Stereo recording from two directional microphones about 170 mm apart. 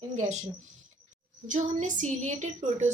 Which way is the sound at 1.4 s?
50° right (ahead or behind).